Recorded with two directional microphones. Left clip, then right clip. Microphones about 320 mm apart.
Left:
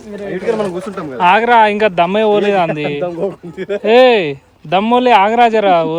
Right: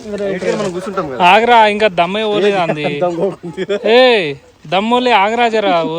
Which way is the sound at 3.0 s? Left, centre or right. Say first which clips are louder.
Right 3 dB; right.